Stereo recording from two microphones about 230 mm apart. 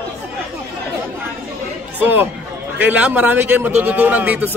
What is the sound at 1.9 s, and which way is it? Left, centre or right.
A man's voice, centre.